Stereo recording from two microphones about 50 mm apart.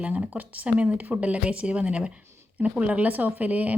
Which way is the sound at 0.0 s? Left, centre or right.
Right.